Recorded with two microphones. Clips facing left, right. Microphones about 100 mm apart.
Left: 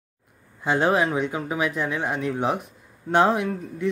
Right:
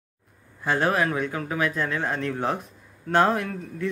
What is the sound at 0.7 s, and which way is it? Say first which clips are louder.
Speech: left 2 dB; 20° left (ahead or behind).